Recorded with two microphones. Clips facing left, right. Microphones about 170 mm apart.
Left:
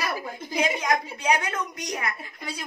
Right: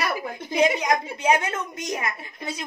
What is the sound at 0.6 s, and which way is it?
A woman's voice, 20° right (ahead or behind).